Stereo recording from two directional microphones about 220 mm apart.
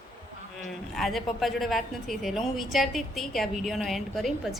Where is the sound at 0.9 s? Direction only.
Centre (ahead or behind).